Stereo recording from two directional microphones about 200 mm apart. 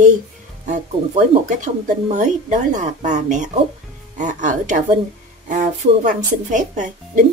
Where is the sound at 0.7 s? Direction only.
40° right (ahead or behind).